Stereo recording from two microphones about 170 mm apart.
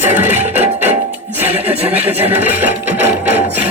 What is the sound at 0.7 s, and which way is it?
Music, 40° right (ahead or behind).